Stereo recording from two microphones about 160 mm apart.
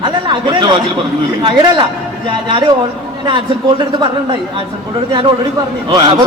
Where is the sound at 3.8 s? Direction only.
30° right (ahead or behind).